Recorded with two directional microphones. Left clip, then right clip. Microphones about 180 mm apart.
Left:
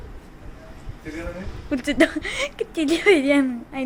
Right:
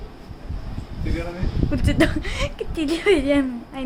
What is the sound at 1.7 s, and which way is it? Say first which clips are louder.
A woman's voice: left 2 dB; 20° left (ahead or behind).